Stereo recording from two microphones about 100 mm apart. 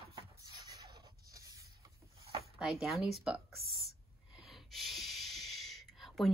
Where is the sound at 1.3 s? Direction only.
35° right (ahead or behind).